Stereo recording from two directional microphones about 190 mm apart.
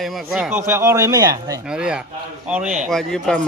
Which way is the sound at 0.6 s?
15° right (ahead or behind).